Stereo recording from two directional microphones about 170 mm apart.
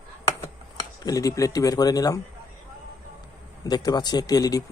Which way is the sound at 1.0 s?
20° left (ahead or behind).